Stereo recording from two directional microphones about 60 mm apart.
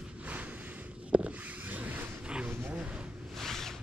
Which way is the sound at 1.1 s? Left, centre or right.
Right.